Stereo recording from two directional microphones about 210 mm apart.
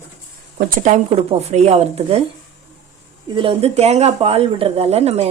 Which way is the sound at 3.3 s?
25° right (ahead or behind).